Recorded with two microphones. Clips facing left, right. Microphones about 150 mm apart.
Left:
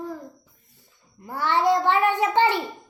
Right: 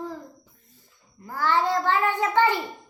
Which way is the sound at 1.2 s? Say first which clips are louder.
Left 1 dB; 20° left (ahead or behind).